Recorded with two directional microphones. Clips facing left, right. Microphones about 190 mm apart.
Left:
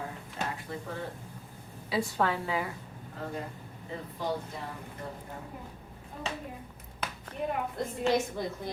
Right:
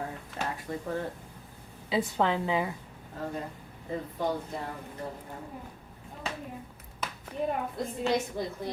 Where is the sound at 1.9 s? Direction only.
20° right (ahead or behind).